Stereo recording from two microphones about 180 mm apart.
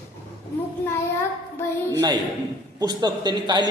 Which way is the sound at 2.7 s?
25° right (ahead or behind).